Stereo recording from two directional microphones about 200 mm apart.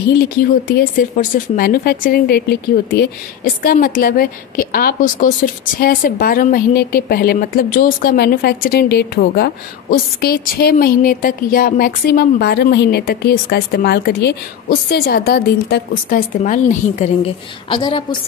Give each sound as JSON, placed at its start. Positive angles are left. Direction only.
{"t": 0.2, "sound": "a woman's voice", "side_deg": 50}